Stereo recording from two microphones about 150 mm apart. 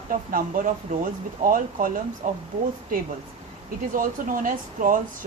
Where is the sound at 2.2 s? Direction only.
55° right (ahead or behind).